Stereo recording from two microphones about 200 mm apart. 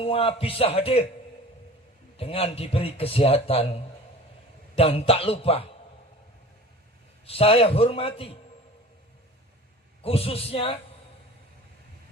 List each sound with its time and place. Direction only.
0.0 s a man's voice: 30° left (ahead or behind)
2.1 s a man's voice: 30° left (ahead or behind)
7.3 s a man's voice: 30° left (ahead or behind)
10.0 s a man's voice: 30° left (ahead or behind)